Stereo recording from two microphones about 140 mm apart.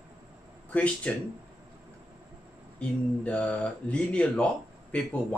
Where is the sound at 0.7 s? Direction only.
10° left (ahead or behind).